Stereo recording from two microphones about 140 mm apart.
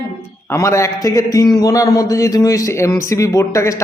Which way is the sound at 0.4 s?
20° left (ahead or behind).